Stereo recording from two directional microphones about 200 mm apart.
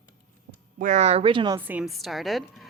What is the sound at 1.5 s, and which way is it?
A woman's voice, 10° right (ahead or behind).